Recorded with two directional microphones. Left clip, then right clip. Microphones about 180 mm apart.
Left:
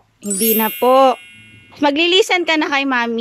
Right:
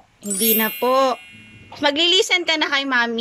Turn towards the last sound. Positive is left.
turn(degrees=10)  # may be behind; listen again after turning